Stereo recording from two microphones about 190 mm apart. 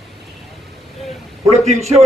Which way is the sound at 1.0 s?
Centre (ahead or behind).